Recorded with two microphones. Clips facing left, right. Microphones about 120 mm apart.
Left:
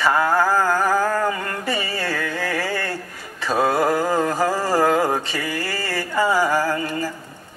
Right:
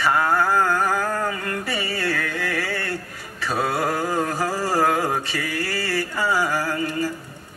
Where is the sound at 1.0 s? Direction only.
40° left (ahead or behind).